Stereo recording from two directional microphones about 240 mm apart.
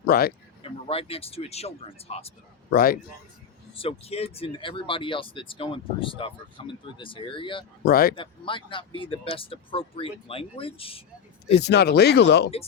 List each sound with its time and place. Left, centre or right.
0.0 s speech: left
0.6 s speech: left
2.6 s a man's voice: left
3.8 s speech: left
7.9 s speech: left
8.1 s speech: left
11.5 s speech: left